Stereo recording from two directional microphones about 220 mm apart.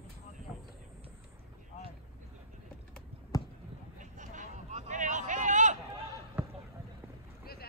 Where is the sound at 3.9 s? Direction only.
35° right (ahead or behind).